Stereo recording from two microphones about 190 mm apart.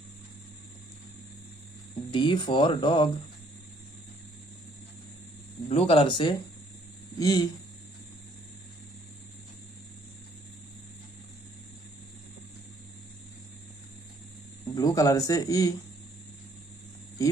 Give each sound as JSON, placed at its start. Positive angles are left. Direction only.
{"t": 2.1, "sound": "speech", "side_deg": 25}
{"t": 5.7, "sound": "speech", "side_deg": 30}
{"t": 14.7, "sound": "speech", "side_deg": 20}